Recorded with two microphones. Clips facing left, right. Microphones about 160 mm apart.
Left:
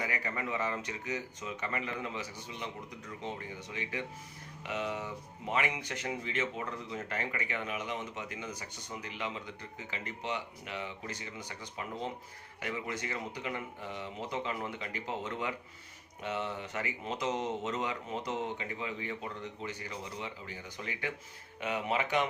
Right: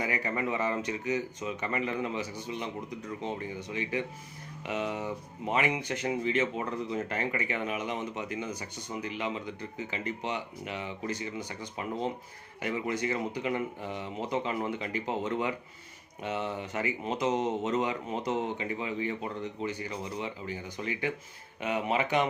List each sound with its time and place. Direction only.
0.0 s speech: 20° right (ahead or behind)
3.7 s speech: 20° right (ahead or behind)
21.6 s speech: 20° right (ahead or behind)